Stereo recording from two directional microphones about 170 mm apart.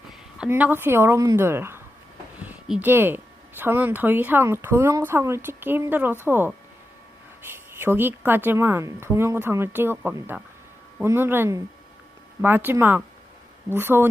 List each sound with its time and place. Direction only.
0.1 s speech: 5° right (ahead or behind)